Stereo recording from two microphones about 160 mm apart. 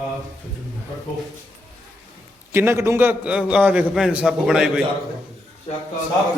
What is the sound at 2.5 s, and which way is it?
A man's voice, 15° right (ahead or behind).